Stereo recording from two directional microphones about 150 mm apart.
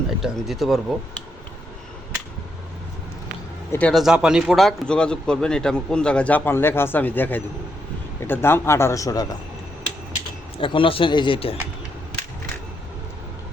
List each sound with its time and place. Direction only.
0.1 s speech: centre (ahead or behind)
3.7 s speech: 10° left (ahead or behind)
3.9 s speech: 5° right (ahead or behind); by 9.2 s 20° left (ahead or behind)
10.6 s speech: 35° left (ahead or behind)